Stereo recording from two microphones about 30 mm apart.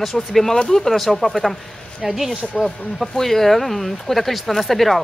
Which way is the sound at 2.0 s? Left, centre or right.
Centre.